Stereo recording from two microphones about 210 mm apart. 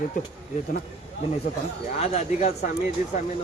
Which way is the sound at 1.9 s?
30° left (ahead or behind).